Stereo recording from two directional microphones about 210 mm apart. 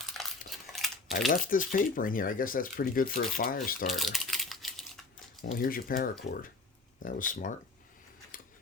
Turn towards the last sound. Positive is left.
turn(degrees=40)  # may be behind; listen again after turning